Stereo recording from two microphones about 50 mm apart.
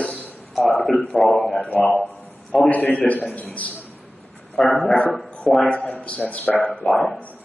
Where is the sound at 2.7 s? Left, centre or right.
Left.